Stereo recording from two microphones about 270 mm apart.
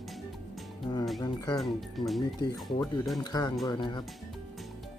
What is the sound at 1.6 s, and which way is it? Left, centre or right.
Speech, centre.